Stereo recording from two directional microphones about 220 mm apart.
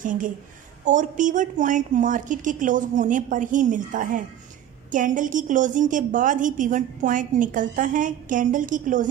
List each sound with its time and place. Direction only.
0.0 s a woman's voice: 35° right (ahead or behind)